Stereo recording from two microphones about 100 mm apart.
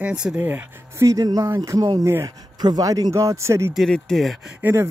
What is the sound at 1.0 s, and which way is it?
Speech, 35° right (ahead or behind).